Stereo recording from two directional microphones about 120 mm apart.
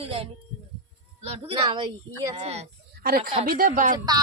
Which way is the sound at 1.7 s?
40° right (ahead or behind).